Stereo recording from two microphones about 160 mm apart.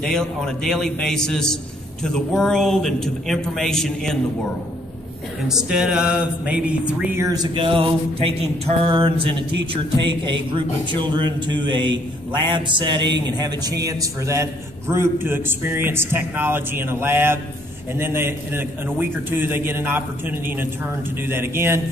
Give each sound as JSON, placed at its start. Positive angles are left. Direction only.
{"t": 0.0, "sound": "speech", "side_deg": 5}
{"t": 5.5, "sound": "a man's voice", "side_deg": -5}
{"t": 7.2, "sound": "a sound", "side_deg": -30}
{"t": 10.0, "sound": "a man's voice", "side_deg": -30}